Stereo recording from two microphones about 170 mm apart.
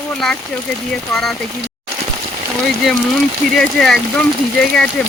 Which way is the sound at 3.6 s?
5° left (ahead or behind).